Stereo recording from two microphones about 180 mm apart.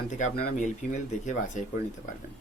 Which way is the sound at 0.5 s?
45° left (ahead or behind).